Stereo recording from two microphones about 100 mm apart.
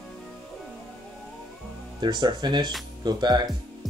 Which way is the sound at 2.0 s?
45° right (ahead or behind).